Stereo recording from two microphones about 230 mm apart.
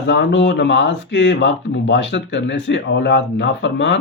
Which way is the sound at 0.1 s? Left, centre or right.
Left.